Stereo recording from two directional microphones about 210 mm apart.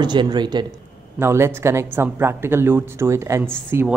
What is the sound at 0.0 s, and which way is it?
Speech, 20° right (ahead or behind).